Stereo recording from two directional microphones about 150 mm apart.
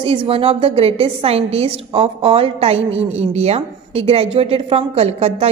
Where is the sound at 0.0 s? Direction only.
35° right (ahead or behind).